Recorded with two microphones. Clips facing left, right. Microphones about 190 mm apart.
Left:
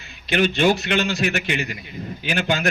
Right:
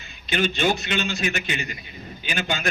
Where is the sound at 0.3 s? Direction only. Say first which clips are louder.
Left 4 dB; 65° left (ahead or behind).